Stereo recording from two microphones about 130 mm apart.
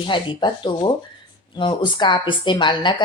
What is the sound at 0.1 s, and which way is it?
A woman's voice, 40° left (ahead or behind).